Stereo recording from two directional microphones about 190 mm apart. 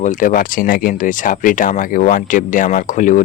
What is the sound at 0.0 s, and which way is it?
Speech, 45° left (ahead or behind).